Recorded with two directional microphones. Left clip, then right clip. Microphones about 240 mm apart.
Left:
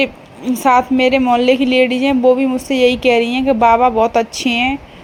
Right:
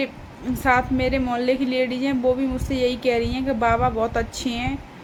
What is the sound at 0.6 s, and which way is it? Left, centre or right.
A woman's voice, left.